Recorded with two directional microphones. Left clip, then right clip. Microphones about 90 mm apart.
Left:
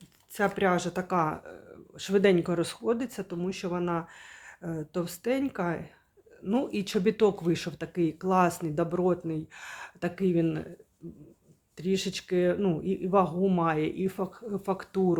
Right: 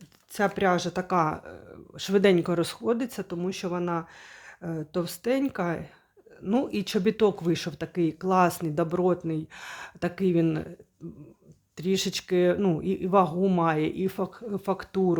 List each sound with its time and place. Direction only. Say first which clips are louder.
0.3 s speech: right 2 dB; 40° right (ahead or behind)
11.8 s speech: right 3 dB; 45° right (ahead or behind); by 15.2 s 30° right (ahead or behind)